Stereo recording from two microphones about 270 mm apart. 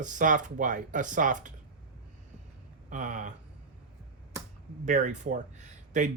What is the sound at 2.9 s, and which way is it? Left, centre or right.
Speech, right.